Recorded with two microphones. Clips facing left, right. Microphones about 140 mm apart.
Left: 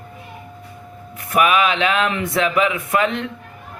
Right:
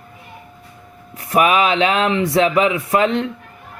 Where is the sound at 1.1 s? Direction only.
30° right (ahead or behind).